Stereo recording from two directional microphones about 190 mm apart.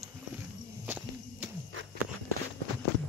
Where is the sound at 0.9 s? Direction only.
10° right (ahead or behind).